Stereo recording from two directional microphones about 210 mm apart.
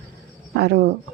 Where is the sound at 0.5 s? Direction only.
55° right (ahead or behind).